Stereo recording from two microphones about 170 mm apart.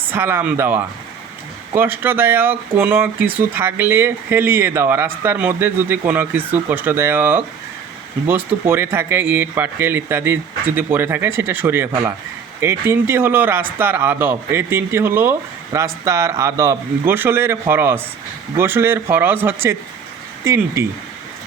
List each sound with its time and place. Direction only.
0.0 s speech: 15° right (ahead or behind)